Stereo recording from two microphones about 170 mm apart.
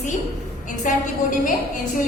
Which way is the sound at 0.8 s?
50° left (ahead or behind).